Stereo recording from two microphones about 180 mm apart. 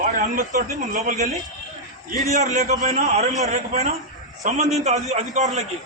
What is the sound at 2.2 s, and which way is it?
A man's voice, 40° right (ahead or behind).